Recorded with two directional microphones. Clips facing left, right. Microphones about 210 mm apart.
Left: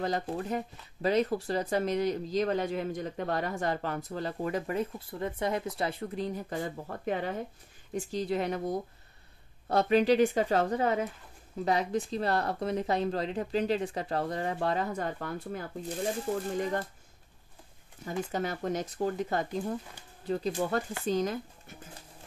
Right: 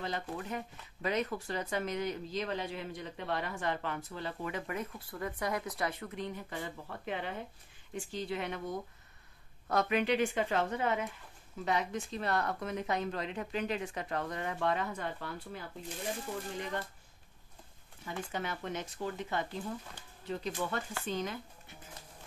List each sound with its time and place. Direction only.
0.0 s speech: 35° left (ahead or behind)
18.0 s speech: 40° left (ahead or behind)